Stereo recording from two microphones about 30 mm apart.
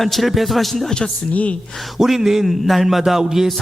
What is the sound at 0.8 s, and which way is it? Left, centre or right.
Speech, left.